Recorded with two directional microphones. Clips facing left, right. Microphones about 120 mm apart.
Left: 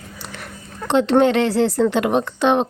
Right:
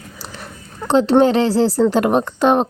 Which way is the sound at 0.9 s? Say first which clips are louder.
Right 2 dB; 35° right (ahead or behind).